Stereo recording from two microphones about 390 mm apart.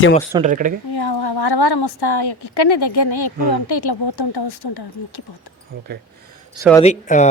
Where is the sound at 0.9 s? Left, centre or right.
Left.